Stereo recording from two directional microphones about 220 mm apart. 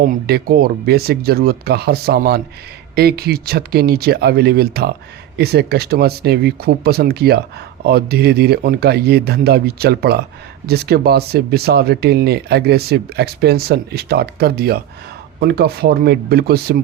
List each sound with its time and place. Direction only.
0.0 s speech: 45° right (ahead or behind)